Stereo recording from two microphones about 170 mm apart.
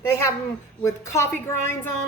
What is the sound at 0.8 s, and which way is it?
A woman's voice, 15° left (ahead or behind).